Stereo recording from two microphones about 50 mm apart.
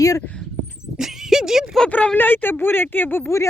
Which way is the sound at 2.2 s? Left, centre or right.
Left.